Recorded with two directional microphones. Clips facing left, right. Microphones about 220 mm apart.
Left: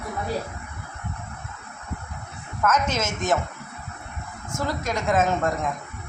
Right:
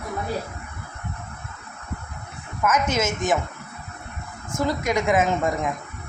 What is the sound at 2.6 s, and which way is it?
Speech, 10° right (ahead or behind).